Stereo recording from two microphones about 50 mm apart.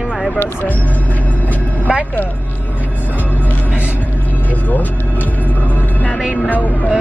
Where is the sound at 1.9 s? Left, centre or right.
Centre.